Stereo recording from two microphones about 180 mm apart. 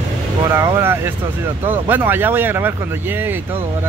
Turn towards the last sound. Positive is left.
turn(degrees=-10)  # may be behind; listen again after turning